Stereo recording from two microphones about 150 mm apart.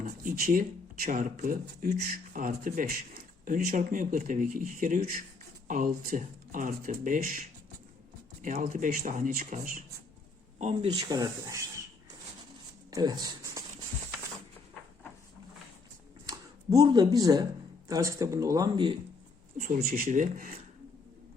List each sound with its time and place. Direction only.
0.0 s speech: 65° right (ahead or behind)
10.6 s speech: 45° right (ahead or behind)
11.1 s speech: 25° right (ahead or behind)
12.9 s speech: 25° right (ahead or behind)
16.2 s a sound: 25° right (ahead or behind)
17.8 s speech: 20° right (ahead or behind)
19.5 s speech: 60° right (ahead or behind)